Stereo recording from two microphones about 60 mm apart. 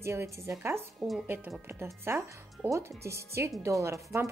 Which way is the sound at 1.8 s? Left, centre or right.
Right.